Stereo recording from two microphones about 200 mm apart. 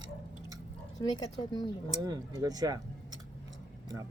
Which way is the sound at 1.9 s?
20° right (ahead or behind).